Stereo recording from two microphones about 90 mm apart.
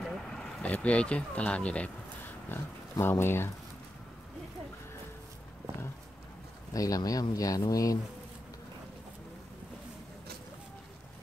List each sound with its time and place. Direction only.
0.0 s speech: 5° left (ahead or behind)
2.5 s speech: 25° left (ahead or behind)
6.7 s speech: 40° left (ahead or behind)